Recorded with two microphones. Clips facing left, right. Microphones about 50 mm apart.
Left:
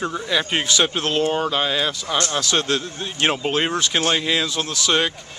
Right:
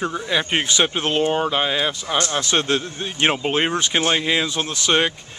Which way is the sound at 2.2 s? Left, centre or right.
Right.